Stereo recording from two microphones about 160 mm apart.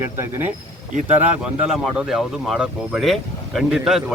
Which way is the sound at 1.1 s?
10° right (ahead or behind).